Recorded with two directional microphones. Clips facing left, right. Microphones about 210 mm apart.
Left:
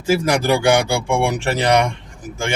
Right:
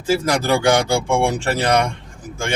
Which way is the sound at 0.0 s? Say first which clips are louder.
Left 1 dB; 10° left (ahead or behind).